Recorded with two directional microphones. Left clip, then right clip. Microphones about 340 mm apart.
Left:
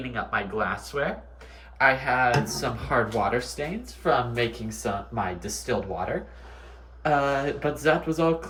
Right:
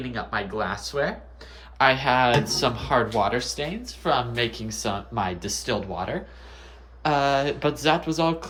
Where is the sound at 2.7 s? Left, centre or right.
Centre.